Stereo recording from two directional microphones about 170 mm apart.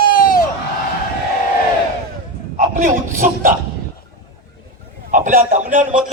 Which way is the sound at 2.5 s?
50° right (ahead or behind).